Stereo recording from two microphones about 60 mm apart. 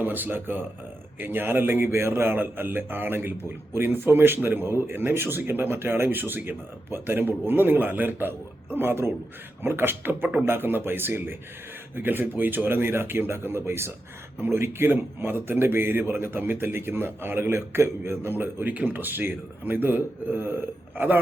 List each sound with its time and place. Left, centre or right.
0.0 s speech: right